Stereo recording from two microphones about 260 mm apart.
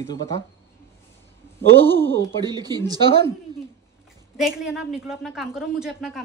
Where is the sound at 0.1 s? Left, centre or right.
Centre.